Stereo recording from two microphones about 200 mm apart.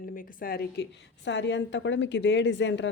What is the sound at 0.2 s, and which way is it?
A woman's voice, 45° left (ahead or behind).